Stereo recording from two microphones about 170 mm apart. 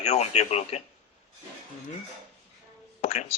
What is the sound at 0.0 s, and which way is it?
Speech, 40° left (ahead or behind).